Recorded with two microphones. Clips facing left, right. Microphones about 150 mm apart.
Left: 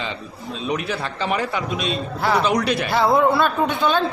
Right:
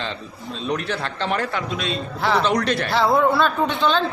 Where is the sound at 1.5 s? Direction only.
20° left (ahead or behind).